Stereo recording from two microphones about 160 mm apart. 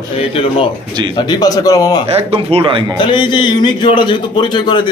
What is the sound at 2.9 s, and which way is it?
A man's voice, 30° left (ahead or behind).